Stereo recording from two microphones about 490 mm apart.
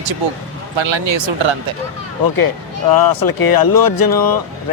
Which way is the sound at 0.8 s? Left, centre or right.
Right.